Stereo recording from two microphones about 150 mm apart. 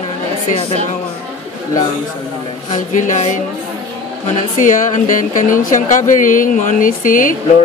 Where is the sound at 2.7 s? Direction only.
55° left (ahead or behind).